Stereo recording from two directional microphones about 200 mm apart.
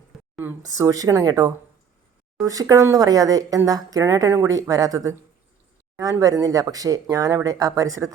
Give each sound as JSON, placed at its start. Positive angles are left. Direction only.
{"t": 0.3, "sound": "speech", "side_deg": -15}